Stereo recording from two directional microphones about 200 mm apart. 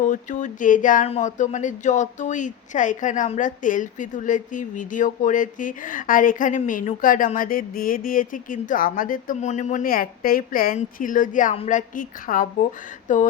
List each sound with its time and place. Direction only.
0.1 s speech: 40° left (ahead or behind)